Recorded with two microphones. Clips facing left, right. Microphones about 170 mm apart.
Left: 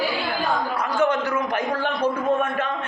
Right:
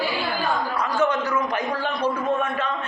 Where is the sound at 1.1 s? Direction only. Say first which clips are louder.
Left 1 dB; 55° left (ahead or behind).